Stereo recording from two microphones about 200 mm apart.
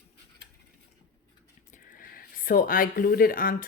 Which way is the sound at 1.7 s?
45° left (ahead or behind).